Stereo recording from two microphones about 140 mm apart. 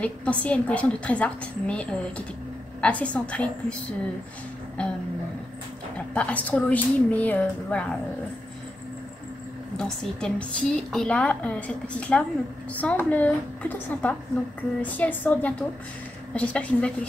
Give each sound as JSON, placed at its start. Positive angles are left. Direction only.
{"t": 0.0, "sound": "a woman's voice", "side_deg": 10}
{"t": 4.8, "sound": "a woman's voice", "side_deg": 10}
{"t": 5.9, "sound": "a woman's voice", "side_deg": 10}
{"t": 9.8, "sound": "a woman's voice", "side_deg": 5}